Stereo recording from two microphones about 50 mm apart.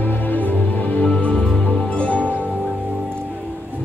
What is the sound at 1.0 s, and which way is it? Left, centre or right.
Music, left.